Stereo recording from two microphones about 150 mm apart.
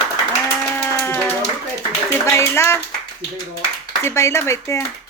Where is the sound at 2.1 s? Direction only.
20° left (ahead or behind).